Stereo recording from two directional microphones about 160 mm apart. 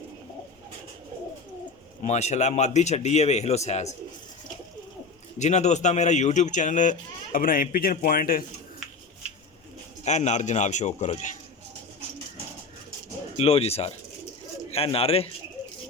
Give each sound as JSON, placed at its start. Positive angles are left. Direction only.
{"t": 2.0, "sound": "speech", "side_deg": 45}
{"t": 5.4, "sound": "speech", "side_deg": 45}
{"t": 7.3, "sound": "speech", "side_deg": 60}
{"t": 10.0, "sound": "speech", "side_deg": 45}
{"t": 13.3, "sound": "speech", "side_deg": 40}